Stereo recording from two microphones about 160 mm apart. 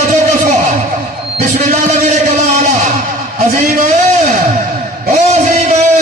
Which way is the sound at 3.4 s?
60° right (ahead or behind).